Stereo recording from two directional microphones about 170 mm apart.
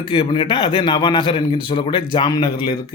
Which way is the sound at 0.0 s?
30° left (ahead or behind).